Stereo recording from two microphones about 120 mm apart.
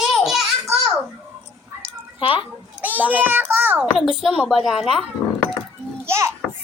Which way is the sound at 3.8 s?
5° right (ahead or behind).